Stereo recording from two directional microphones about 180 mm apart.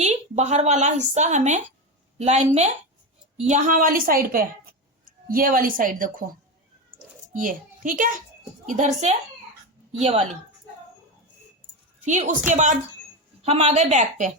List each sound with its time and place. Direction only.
0.0 s a woman's voice: 40° right (ahead or behind)
7.3 s a child's voice: 50° right (ahead or behind)
11.9 s a woman's voice: 40° right (ahead or behind)